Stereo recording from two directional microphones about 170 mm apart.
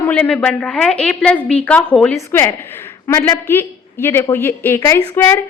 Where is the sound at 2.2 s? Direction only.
15° left (ahead or behind).